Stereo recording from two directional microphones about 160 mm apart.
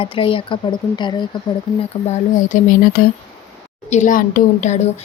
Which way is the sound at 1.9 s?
40° left (ahead or behind).